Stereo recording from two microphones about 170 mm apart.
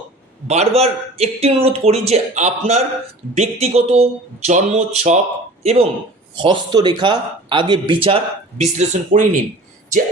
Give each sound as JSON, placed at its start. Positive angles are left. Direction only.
{"t": 0.4, "sound": "speech", "side_deg": -40}
{"t": 6.3, "sound": "speech", "side_deg": -30}